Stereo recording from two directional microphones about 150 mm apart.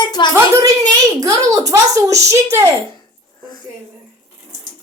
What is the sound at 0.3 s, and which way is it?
A child's voice, 20° right (ahead or behind).